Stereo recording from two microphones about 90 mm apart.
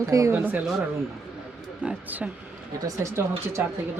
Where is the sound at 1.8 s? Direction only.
20° right (ahead or behind).